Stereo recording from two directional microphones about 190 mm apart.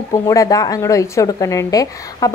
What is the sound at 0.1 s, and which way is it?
A woman's voice, 15° left (ahead or behind).